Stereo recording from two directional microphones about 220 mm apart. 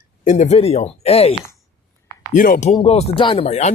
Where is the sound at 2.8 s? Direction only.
25° left (ahead or behind).